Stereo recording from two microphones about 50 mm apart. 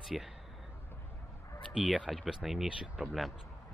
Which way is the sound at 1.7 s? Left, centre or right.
Centre.